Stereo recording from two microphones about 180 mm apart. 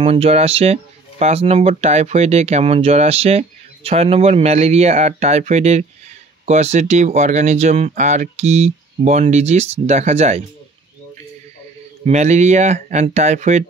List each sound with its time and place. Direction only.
0.0 s speech: 35° right (ahead or behind)
12.0 s speech: 40° right (ahead or behind)